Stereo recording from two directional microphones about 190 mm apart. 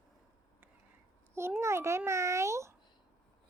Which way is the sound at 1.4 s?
15° right (ahead or behind).